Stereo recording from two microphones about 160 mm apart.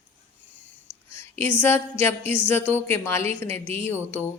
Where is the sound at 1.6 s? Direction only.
15° left (ahead or behind).